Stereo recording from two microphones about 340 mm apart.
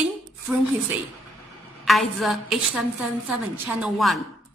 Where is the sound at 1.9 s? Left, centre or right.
Centre.